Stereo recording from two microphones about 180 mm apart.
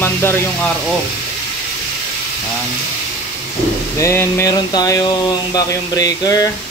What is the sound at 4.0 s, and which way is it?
Speech, 15° left (ahead or behind).